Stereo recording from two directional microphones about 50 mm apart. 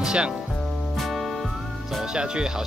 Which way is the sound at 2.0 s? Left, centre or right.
Centre.